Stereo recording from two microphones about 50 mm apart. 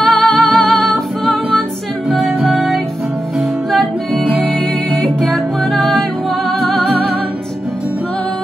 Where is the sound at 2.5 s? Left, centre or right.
Centre.